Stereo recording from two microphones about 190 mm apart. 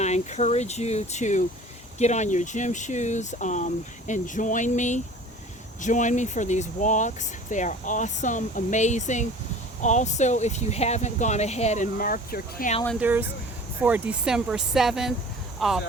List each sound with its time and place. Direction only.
0.0 s speech: 35° left (ahead or behind)
13.0 s speech: 10° right (ahead or behind)